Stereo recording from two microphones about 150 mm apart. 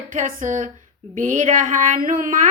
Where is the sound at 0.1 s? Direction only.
60° right (ahead or behind).